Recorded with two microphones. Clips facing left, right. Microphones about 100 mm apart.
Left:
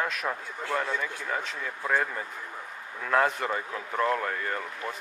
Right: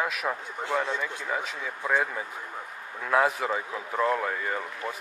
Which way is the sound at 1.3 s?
5° right (ahead or behind).